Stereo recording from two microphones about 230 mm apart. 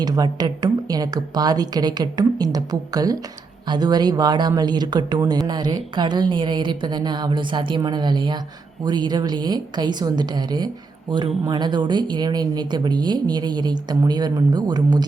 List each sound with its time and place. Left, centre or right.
0.0 s a woman's voice: centre